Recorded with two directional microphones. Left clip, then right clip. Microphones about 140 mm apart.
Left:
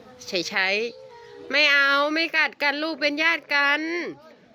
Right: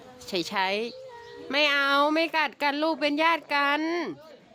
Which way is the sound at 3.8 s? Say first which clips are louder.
Left 1 dB; 35° right (ahead or behind).